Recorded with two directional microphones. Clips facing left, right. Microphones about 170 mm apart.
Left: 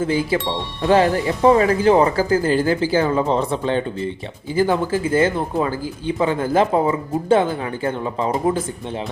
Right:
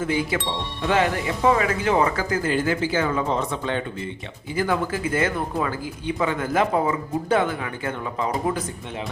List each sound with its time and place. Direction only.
0.0 s speech: 30° left (ahead or behind)